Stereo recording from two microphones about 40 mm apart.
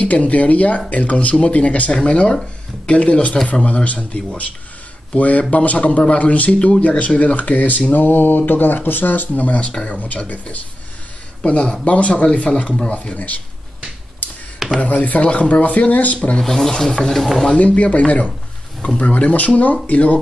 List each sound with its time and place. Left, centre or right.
0.0 s speech: left
9.3 s speech: left
14.8 s speech: left
16.3 s rub: centre
17.2 s speech: centre
17.6 s speech: left